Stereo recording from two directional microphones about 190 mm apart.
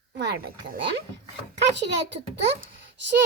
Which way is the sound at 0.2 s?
65° right (ahead or behind).